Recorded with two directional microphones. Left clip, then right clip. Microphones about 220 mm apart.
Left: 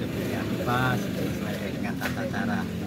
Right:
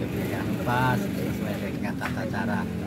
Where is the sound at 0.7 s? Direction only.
20° right (ahead or behind).